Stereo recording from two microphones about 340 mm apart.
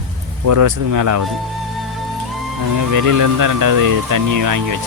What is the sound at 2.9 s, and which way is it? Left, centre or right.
Speech, right.